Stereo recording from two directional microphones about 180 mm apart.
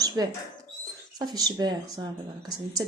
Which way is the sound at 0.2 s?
20° right (ahead or behind).